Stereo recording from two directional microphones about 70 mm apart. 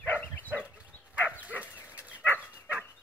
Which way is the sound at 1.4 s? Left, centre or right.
Right.